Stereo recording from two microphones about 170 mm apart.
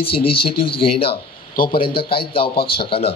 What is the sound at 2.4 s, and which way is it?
Speech, 60° left (ahead or behind).